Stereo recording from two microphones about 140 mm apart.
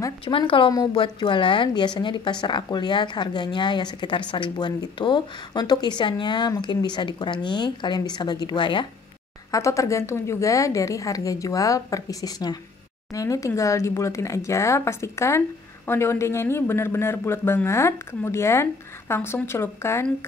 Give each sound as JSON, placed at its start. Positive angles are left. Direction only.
{"t": 0.2, "sound": "speech", "side_deg": 40}
{"t": 9.5, "sound": "a woman's voice", "side_deg": 20}